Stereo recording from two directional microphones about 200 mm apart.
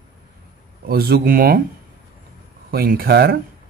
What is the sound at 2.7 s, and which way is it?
Speech, 50° right (ahead or behind).